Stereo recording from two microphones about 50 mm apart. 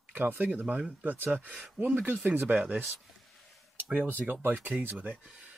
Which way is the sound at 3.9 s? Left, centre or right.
Right.